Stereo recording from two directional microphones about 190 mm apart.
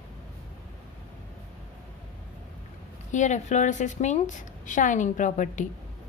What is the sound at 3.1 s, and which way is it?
A woman's voice, 40° left (ahead or behind).